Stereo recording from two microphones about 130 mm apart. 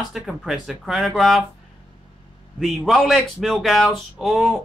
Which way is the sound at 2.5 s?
Centre (ahead or behind).